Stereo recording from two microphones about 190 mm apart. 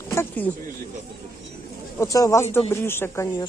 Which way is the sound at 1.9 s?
15° left (ahead or behind).